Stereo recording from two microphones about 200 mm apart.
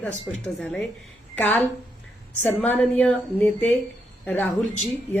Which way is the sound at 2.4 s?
10° left (ahead or behind).